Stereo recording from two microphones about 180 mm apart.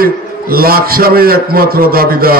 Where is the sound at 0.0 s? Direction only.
55° right (ahead or behind).